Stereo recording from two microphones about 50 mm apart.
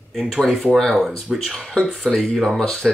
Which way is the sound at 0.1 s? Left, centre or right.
Centre.